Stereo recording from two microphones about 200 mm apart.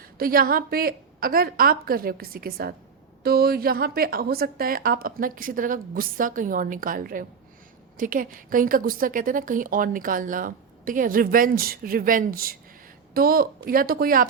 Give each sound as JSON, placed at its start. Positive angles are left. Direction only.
{"t": 0.0, "sound": "a woman's voice", "side_deg": -45}